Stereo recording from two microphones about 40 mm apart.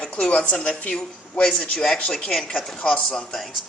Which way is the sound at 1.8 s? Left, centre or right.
Left.